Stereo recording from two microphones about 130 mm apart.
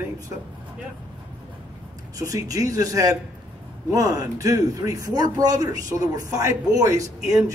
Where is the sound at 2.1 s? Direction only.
25° right (ahead or behind).